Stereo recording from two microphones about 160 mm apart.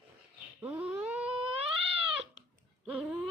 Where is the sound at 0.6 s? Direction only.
10° right (ahead or behind).